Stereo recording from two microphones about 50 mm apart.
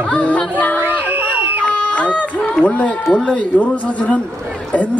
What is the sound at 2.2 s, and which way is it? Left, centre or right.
Speech, left.